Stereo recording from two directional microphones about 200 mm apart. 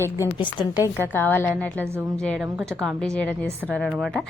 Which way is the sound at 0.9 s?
10° left (ahead or behind).